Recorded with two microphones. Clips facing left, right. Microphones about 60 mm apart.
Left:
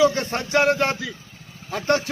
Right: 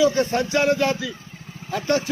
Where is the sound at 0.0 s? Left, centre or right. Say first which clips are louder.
Right 1 dB; left.